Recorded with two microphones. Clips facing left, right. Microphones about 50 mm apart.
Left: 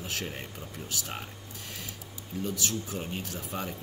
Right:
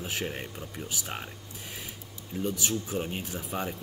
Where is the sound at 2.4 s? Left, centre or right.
Centre.